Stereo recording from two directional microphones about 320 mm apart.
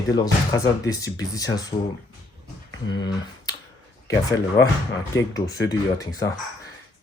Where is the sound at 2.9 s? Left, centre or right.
Centre.